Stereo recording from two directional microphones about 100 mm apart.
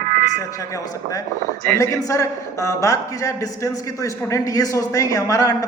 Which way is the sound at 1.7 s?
35° left (ahead or behind).